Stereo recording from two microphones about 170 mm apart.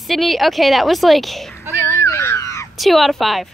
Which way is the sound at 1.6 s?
10° right (ahead or behind).